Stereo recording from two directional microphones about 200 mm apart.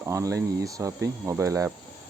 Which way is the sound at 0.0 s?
15° right (ahead or behind).